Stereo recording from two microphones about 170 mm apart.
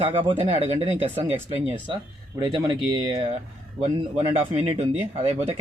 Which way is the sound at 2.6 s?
25° right (ahead or behind).